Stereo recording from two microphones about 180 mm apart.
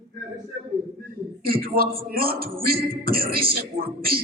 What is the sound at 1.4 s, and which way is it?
A man's voice, 55° right (ahead or behind).